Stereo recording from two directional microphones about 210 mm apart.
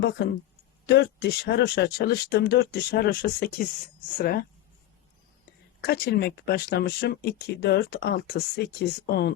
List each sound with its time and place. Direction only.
0.9 s speech: 55° left (ahead or behind)
5.8 s speech: 50° left (ahead or behind)